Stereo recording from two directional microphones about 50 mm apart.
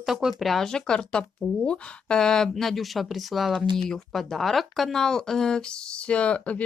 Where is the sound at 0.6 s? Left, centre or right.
Centre.